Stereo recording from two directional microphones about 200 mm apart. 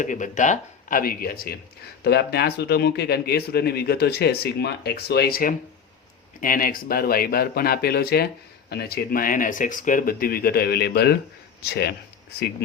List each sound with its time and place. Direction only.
0.0 s a man's voice: 40° left (ahead or behind)